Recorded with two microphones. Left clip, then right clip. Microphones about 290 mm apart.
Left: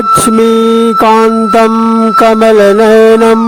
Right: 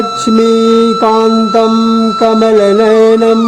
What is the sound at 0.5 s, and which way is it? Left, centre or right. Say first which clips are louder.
Music: left 1 dB; centre.